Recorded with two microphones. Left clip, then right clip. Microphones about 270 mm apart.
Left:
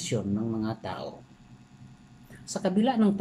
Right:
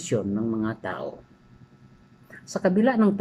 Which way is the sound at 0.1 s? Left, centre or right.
Centre.